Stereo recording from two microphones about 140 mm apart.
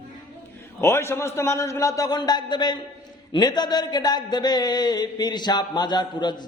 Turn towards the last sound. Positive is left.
turn(degrees=30)  # may be behind; listen again after turning